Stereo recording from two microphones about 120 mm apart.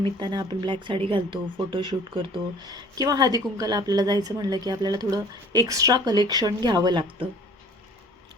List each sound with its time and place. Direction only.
0.0 s speech: 40° right (ahead or behind)
2.9 s a woman's voice: 30° right (ahead or behind)